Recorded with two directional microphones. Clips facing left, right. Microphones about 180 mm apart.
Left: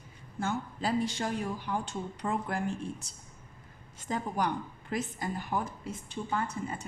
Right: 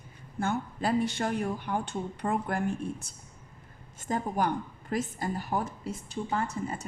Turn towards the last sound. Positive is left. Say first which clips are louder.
# right 2 dB
turn(degrees=-40)  # may be behind; listen again after turning